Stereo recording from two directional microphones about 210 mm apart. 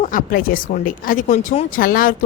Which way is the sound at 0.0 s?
40° left (ahead or behind).